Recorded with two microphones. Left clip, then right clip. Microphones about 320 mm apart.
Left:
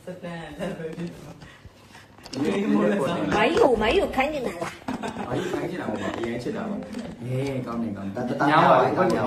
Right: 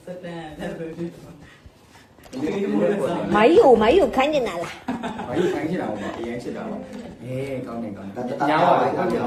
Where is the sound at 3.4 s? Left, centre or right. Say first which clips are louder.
Right 7 dB; right.